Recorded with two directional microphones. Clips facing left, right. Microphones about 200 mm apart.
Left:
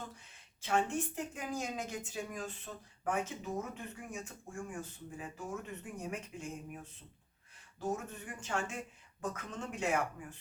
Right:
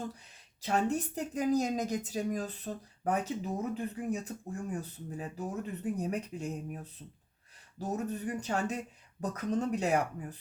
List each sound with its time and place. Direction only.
0.6 s a woman's voice: 40° right (ahead or behind)
7.8 s a woman's voice: 40° right (ahead or behind)